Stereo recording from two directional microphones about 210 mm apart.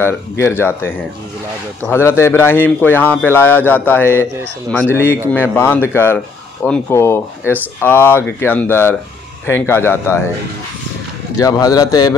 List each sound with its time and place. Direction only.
0.0 s speech: 10° left (ahead or behind)
11.3 s speech: 15° left (ahead or behind)